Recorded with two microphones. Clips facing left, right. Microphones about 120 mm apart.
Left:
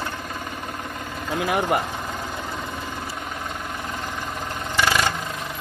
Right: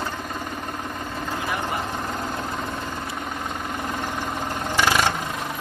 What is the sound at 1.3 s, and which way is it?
Speech, 90° left.